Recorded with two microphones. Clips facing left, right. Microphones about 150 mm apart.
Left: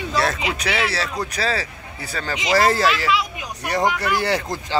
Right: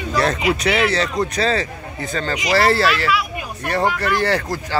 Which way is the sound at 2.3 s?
20° left (ahead or behind).